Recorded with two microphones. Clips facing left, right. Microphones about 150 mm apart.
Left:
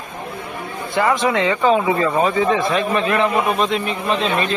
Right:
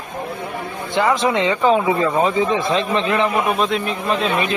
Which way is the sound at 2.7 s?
25° right (ahead or behind).